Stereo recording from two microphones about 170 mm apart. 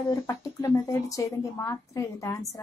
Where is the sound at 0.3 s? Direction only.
20° left (ahead or behind).